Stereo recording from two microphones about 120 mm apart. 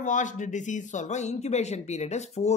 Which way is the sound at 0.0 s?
90° left.